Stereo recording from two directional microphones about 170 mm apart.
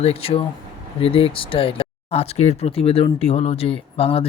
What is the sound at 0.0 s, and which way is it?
Speech, 35° left (ahead or behind).